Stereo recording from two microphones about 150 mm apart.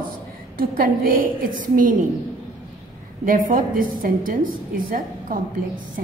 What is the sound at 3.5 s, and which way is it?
Speech, 65° right (ahead or behind).